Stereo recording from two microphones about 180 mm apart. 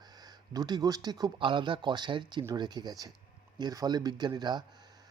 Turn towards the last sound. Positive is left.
turn(degrees=-25)  # may be behind; listen again after turning